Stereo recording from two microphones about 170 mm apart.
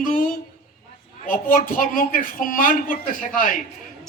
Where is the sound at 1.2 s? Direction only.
55° left (ahead or behind).